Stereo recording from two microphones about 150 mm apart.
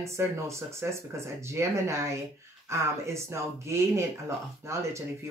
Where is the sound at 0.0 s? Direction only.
20° right (ahead or behind).